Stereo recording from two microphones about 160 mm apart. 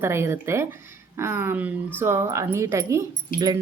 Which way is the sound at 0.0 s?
15° right (ahead or behind).